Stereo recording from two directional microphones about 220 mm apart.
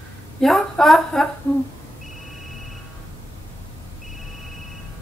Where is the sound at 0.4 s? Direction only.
Centre (ahead or behind).